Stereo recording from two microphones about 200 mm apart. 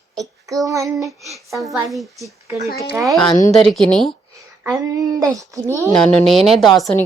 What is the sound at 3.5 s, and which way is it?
Speech, centre (ahead or behind).